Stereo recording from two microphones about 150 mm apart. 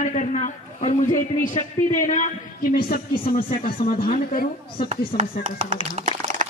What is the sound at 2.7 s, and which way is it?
Speech, 70° left (ahead or behind).